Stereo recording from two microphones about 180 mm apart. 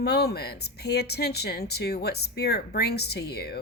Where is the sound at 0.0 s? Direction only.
65° left (ahead or behind).